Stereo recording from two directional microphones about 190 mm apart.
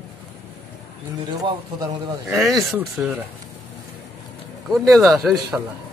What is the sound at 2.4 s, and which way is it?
Speech, centre (ahead or behind).